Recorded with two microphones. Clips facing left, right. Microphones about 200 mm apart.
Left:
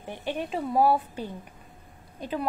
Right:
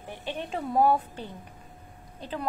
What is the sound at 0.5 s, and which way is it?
A woman's voice, centre (ahead or behind).